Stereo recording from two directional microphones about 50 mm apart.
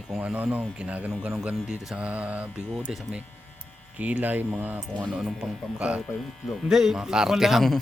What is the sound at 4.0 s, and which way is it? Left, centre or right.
Speech, right.